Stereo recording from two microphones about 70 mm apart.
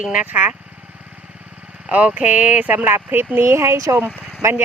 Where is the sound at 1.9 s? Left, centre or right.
Right.